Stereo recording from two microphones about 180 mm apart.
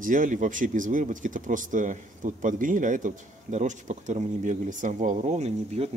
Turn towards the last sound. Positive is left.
turn(degrees=-35)  # may be behind; listen again after turning